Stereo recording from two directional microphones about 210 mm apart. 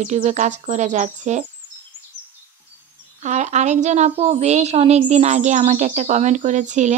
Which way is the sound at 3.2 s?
35° right (ahead or behind).